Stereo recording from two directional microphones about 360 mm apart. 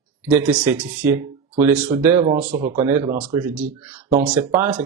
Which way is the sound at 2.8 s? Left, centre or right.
Centre.